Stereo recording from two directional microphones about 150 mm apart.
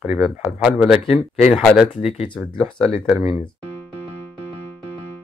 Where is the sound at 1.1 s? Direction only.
45° left (ahead or behind).